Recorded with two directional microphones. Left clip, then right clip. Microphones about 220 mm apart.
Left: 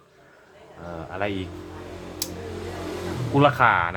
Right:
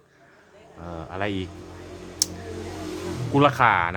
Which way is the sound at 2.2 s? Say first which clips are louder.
Right 7 dB; 35° right (ahead or behind).